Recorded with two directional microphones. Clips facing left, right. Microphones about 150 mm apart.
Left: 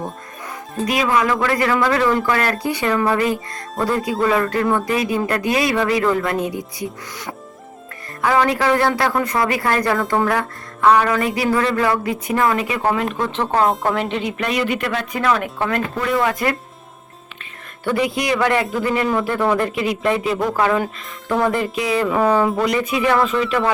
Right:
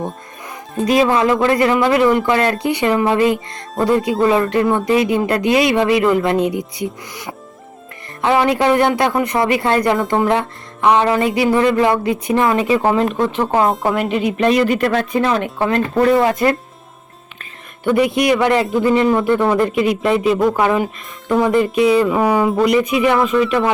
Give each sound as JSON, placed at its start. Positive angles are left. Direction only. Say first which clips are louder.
{"t": 0.9, "sound": "speech", "louder": "right 5 dB", "side_deg": -30}
{"t": 8.2, "sound": "speech", "louder": "right 3 dB", "side_deg": -20}
{"t": 13.1, "sound": "speech", "louder": "right 4 dB", "side_deg": -15}
{"t": 14.4, "sound": "speech", "louder": "right 8 dB", "side_deg": -35}
{"t": 15.1, "sound": "speech", "louder": "right 3 dB", "side_deg": -25}
{"t": 18.1, "sound": "speech", "louder": "right 4 dB", "side_deg": -20}
{"t": 22.0, "sound": "speech", "louder": "right 1 dB", "side_deg": -10}